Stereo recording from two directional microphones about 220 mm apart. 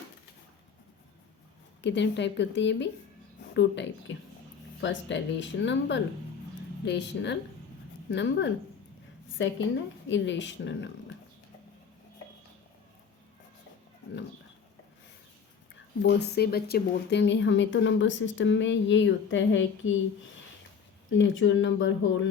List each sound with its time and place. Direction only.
1.8 s a woman's voice: 55° left (ahead or behind)
16.0 s speech: 50° left (ahead or behind)
21.1 s speech: 60° left (ahead or behind)